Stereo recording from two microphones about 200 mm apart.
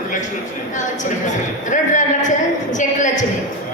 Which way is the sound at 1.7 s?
40° left (ahead or behind).